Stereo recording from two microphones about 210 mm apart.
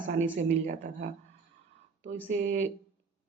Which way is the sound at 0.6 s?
40° right (ahead or behind).